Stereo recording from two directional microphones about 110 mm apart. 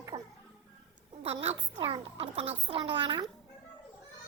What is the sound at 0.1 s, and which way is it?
Music, 50° right (ahead or behind).